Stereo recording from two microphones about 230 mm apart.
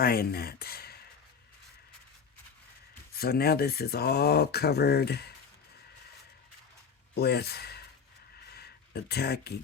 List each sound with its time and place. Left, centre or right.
0.0 s speech: left
3.2 s speech: left
7.1 s speech: left
8.4 s a sound: left